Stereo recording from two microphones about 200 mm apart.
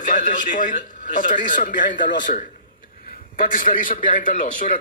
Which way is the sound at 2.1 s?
65° left (ahead or behind).